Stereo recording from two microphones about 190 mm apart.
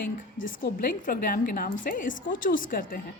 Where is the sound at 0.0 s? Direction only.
45° left (ahead or behind).